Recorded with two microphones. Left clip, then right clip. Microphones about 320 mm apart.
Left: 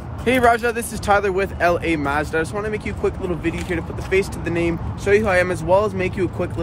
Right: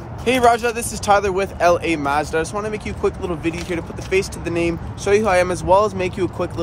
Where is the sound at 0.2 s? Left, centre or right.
Centre.